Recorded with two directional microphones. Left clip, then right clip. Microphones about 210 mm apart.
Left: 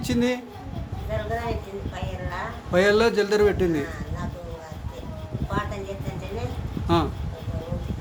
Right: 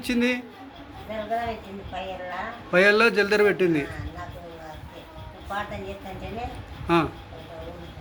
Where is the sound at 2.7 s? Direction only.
5° left (ahead or behind).